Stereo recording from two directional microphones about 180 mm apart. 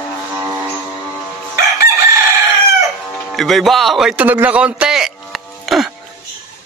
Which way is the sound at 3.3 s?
Centre (ahead or behind).